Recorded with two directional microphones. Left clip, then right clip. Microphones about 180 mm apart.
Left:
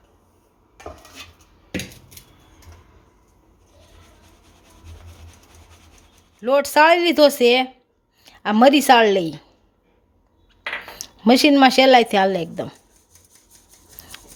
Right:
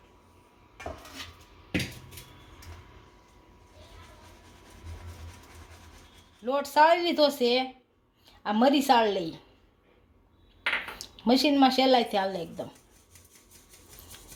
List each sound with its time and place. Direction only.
6.4 s a woman's voice: 55° left (ahead or behind)
11.3 s a woman's voice: 50° left (ahead or behind)